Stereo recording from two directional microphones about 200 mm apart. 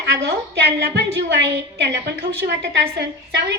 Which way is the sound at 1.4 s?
55° right (ahead or behind).